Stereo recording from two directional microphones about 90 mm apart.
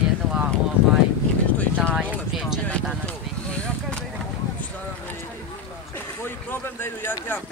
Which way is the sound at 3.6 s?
10° left (ahead or behind).